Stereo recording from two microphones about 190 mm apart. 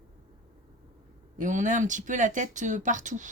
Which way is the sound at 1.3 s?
40° right (ahead or behind).